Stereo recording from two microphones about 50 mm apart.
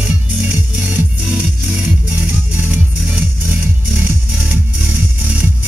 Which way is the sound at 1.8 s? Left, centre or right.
Right.